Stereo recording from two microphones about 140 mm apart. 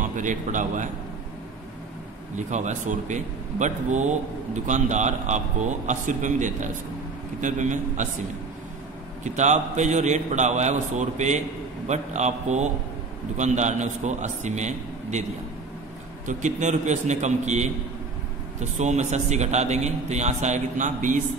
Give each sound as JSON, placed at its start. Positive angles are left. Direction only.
{"t": 0.0, "sound": "a man's voice", "side_deg": -65}
{"t": 2.3, "sound": "a man's voice", "side_deg": -60}
{"t": 9.2, "sound": "a man's voice", "side_deg": -60}
{"t": 16.3, "sound": "a man's voice", "side_deg": -60}